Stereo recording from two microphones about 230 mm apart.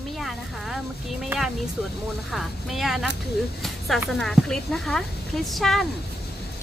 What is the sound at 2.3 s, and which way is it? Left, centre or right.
Speech, centre.